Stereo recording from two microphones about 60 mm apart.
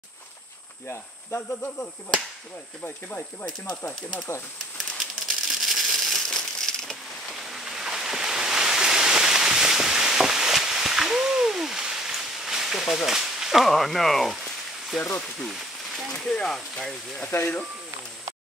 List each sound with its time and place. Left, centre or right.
0.8 s cricket: left
3.1 s speech: left
4.9 s crumpling: centre
7.3 s waves: centre
15.0 s cricket: left
16.1 s speech: centre